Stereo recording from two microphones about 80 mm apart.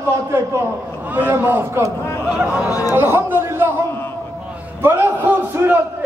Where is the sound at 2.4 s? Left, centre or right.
Centre.